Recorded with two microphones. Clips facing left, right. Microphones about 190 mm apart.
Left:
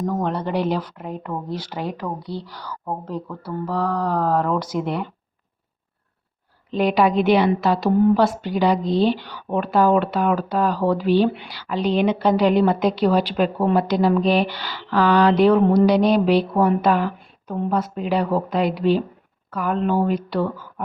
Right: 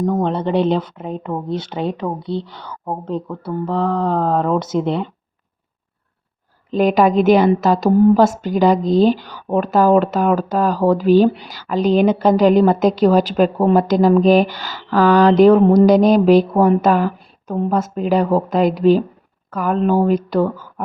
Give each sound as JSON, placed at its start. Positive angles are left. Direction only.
{"t": 0.0, "sound": "speech", "side_deg": -20}
{"t": 6.7, "sound": "a woman's voice", "side_deg": -45}